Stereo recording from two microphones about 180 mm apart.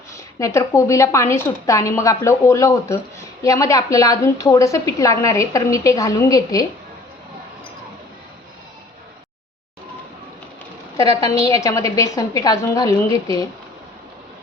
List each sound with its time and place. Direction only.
0.3 s a woman's voice: 15° left (ahead or behind)
10.9 s a woman's voice: 20° left (ahead or behind)